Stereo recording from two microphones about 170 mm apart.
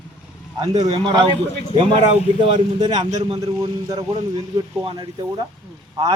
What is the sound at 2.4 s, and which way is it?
Speech, 25° right (ahead or behind).